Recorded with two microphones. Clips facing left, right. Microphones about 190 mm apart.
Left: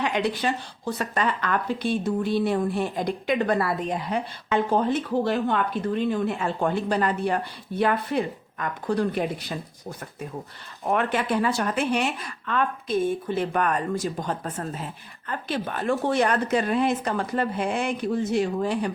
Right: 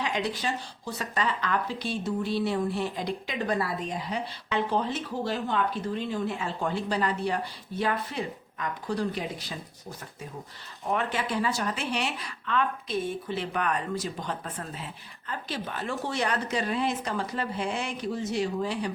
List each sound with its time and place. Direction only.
0.0 s speech: 60° left (ahead or behind)
10.8 s speech: 55° left (ahead or behind)
15.3 s speech: 55° left (ahead or behind)